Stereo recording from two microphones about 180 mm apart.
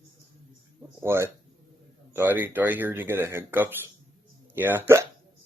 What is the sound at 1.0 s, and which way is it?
Speech, 15° right (ahead or behind).